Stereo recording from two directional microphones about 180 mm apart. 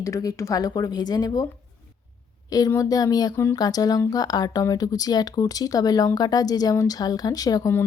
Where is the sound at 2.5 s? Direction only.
20° left (ahead or behind).